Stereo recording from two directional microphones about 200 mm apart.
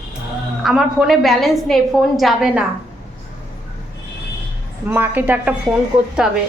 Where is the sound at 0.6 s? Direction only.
Centre (ahead or behind).